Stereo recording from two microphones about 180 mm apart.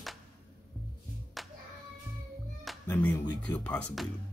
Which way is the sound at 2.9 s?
10° left (ahead or behind).